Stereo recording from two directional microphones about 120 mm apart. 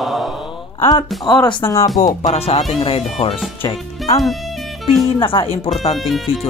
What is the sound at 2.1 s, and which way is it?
Speech, 65° left (ahead or behind).